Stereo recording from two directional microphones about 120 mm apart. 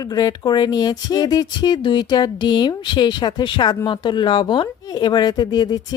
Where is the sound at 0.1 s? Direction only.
30° left (ahead or behind).